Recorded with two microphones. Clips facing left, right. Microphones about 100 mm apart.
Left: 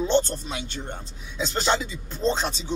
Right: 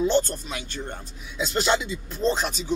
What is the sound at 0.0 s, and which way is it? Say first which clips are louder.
Speech: even; 25° left (ahead or behind).